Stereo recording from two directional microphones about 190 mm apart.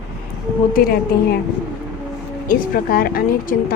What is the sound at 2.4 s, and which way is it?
A woman's voice, 50° left (ahead or behind).